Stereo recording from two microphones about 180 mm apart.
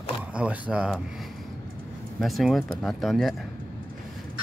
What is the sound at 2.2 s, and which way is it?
Speech, centre (ahead or behind).